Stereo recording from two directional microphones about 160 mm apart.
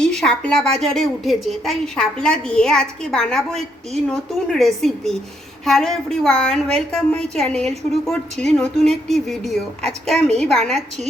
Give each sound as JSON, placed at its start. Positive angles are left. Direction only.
{"t": 0.0, "sound": "a woman's voice", "side_deg": 5}